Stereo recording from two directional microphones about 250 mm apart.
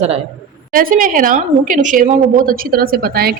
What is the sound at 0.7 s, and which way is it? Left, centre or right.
A woman's voice, right.